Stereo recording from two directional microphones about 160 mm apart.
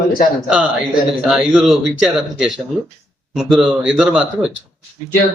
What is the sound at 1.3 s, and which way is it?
Speech, 5° right (ahead or behind).